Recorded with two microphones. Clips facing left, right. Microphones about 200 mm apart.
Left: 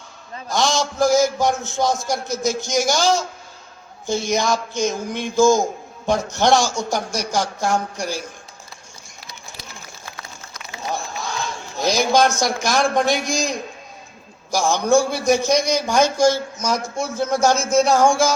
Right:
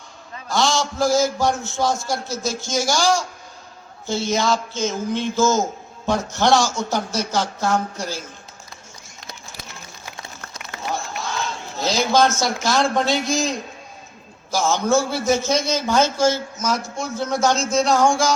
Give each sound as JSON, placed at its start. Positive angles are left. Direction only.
{"t": 0.4, "sound": "a man's voice", "side_deg": 20}
{"t": 10.7, "sound": "a sound", "side_deg": -60}
{"t": 11.2, "sound": "a sound", "side_deg": 15}
{"t": 12.5, "sound": "a man's voice", "side_deg": 15}
{"t": 17.0, "sound": "a man's voice", "side_deg": -20}
{"t": 17.8, "sound": "a man's voice", "side_deg": 15}